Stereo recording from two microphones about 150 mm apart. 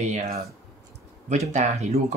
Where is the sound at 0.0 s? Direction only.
50° right (ahead or behind).